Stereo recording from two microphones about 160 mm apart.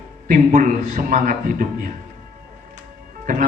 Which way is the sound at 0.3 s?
55° right (ahead or behind).